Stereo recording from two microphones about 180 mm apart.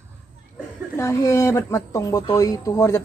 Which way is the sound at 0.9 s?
15° left (ahead or behind).